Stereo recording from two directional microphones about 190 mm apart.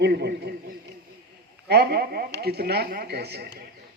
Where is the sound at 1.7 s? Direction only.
55° right (ahead or behind).